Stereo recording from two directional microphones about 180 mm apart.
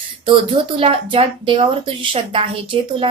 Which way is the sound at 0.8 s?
30° right (ahead or behind).